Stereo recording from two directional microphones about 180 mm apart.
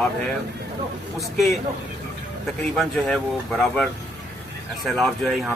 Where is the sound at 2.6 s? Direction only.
5° left (ahead or behind).